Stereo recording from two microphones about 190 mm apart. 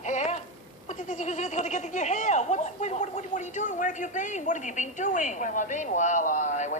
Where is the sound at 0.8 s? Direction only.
40° left (ahead or behind).